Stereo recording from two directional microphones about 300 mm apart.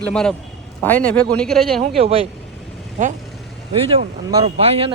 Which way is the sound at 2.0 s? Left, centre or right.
Centre.